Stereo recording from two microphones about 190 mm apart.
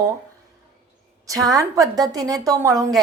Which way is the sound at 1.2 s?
20° right (ahead or behind).